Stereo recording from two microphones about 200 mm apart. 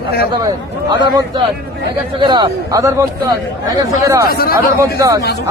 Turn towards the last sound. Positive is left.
turn(degrees=-15)  # may be behind; listen again after turning